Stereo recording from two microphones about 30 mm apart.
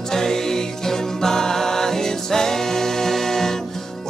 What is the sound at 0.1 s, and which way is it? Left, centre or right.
Music, centre.